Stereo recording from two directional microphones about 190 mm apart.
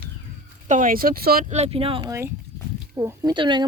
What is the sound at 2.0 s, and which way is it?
A woman's voice, 15° right (ahead or behind).